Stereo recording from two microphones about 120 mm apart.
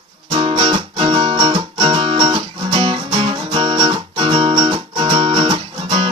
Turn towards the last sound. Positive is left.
turn(degrees=-45)  # may be behind; listen again after turning